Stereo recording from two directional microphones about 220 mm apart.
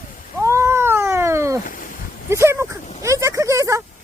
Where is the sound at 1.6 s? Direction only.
40° left (ahead or behind).